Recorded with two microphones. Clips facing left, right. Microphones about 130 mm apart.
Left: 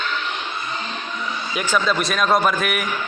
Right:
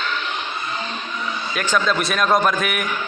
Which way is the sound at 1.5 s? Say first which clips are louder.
Even; 10° left (ahead or behind).